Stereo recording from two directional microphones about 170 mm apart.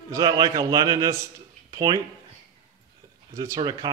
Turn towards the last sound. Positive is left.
turn(degrees=-20)  # may be behind; listen again after turning